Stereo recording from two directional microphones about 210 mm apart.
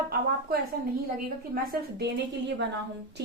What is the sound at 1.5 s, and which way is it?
A woman's voice, 45° right (ahead or behind).